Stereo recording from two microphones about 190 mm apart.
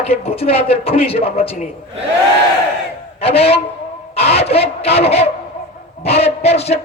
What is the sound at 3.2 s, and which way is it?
A man's voice, 30° left (ahead or behind).